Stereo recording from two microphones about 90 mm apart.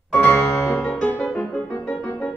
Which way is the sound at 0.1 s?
25° left (ahead or behind).